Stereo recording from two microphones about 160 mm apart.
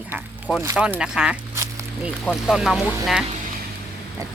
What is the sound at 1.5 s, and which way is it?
Quack, 20° right (ahead or behind).